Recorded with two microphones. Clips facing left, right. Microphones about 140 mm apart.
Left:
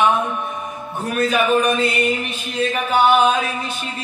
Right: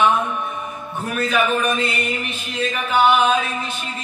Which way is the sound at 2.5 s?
35° left (ahead or behind).